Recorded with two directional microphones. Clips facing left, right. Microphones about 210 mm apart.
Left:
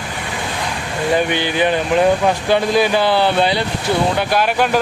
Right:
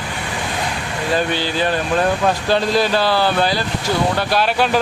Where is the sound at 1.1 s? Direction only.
15° left (ahead or behind).